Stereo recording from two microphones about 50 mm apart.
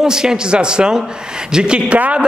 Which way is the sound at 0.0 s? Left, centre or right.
Centre.